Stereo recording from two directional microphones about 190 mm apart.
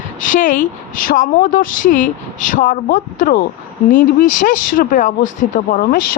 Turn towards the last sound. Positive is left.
turn(degrees=45)  # may be behind; listen again after turning